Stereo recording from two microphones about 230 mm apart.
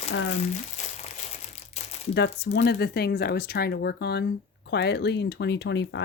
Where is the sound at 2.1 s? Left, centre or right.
Left.